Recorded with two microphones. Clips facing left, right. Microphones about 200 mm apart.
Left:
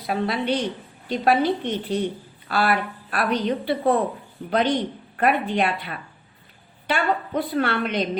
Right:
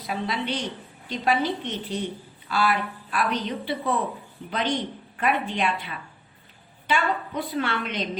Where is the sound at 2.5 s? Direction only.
60° left (ahead or behind).